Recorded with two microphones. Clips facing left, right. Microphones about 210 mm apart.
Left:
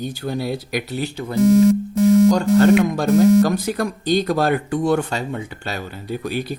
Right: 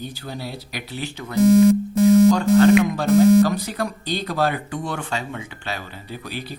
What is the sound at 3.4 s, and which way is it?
Speech, 50° left (ahead or behind).